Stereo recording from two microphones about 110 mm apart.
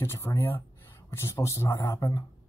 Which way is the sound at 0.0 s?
25° left (ahead or behind).